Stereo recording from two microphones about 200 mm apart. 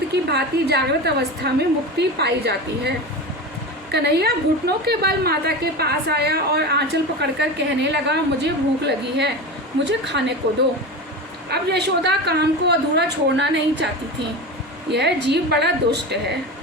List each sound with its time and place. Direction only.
0.1 s a woman's voice: 55° right (ahead or behind)
3.9 s a woman's voice: 55° right (ahead or behind)
11.4 s a woman's voice: 55° right (ahead or behind)